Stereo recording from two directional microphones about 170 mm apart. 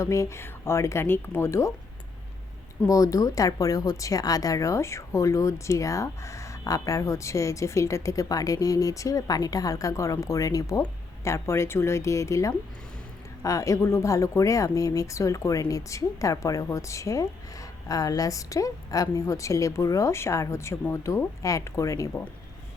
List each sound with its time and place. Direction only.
0.0 s speech: 15° left (ahead or behind)
2.8 s speech: 20° left (ahead or behind)